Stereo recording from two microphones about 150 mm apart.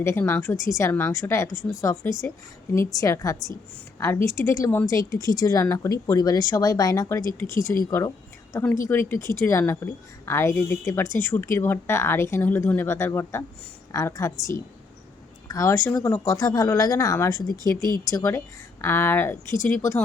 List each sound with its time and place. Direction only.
0.0 s a woman's voice: 20° left (ahead or behind)